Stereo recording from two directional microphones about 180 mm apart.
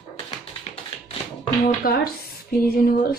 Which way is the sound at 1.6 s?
55° left (ahead or behind).